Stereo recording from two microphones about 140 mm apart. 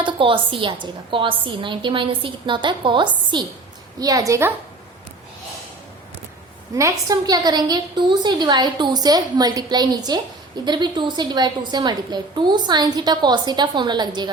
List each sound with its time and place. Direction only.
0.0 s a woman's voice: 40° right (ahead or behind)
4.0 s a woman's voice: 25° right (ahead or behind)
6.7 s a woman's voice: 25° right (ahead or behind)